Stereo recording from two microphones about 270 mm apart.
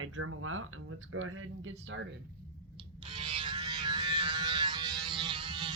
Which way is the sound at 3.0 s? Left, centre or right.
Centre.